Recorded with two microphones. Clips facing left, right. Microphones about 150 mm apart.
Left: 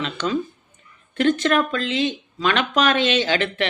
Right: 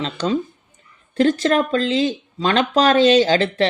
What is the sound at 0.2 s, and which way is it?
Speech, 30° right (ahead or behind).